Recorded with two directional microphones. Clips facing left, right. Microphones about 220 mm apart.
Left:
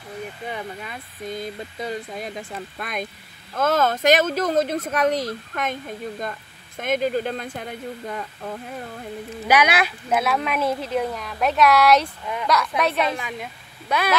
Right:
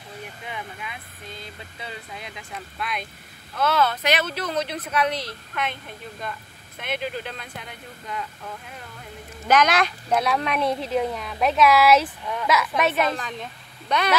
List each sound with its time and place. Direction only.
0.5 s speech: 45° left (ahead or behind)
9.5 s a woman's voice: 10° left (ahead or behind)
13.2 s speech: 10° left (ahead or behind)